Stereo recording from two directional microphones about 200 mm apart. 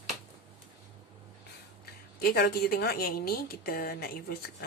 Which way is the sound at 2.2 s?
50° left (ahead or behind).